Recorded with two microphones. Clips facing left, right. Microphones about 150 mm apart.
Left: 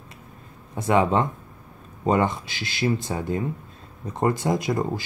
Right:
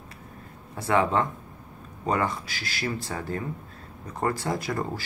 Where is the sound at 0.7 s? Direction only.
20° left (ahead or behind).